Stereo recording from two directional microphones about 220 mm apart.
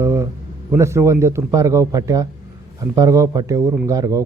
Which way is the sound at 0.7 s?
10° right (ahead or behind).